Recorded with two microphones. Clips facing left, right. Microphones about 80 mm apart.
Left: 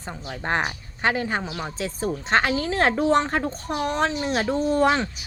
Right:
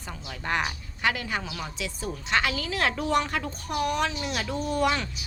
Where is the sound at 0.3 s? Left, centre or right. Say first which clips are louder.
Left 3 dB; left.